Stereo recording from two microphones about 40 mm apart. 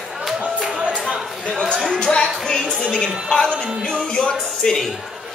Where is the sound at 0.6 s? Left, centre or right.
Centre.